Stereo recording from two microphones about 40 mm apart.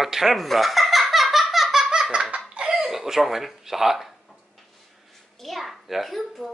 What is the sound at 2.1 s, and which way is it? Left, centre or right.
Laughter, right.